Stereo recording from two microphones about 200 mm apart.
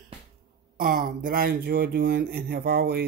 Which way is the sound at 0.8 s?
40° right (ahead or behind).